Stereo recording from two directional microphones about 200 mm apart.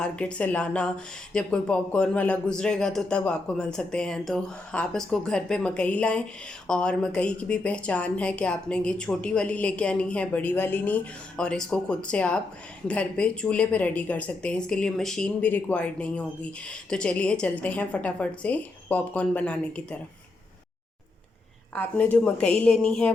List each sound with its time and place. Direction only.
0.0 s a woman's voice: 5° left (ahead or behind)
21.8 s speech: 5° left (ahead or behind)